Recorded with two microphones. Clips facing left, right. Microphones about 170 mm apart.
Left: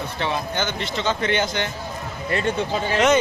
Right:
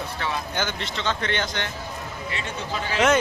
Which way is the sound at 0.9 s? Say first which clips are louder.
Left 5 dB; 10° left (ahead or behind).